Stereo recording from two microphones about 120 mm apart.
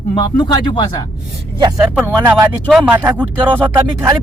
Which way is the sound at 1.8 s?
15° right (ahead or behind).